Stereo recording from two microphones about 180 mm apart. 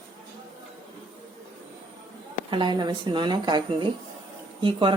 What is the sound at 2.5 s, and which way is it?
Speech, 25° right (ahead or behind).